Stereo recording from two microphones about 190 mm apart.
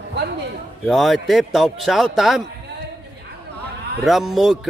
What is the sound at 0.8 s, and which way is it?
A man's voice, centre (ahead or behind).